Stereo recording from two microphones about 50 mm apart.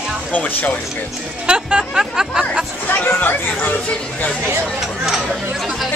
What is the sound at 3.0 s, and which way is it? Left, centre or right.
Speech, left.